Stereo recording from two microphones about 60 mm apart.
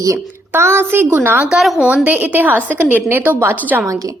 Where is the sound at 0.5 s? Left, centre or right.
Right.